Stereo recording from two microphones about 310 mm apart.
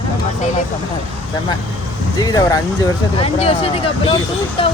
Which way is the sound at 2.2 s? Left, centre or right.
Centre.